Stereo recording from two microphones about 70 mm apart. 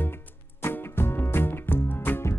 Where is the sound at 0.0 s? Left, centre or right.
Left.